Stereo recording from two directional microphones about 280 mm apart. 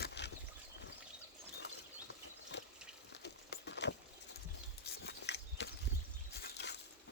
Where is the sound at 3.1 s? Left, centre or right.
Left.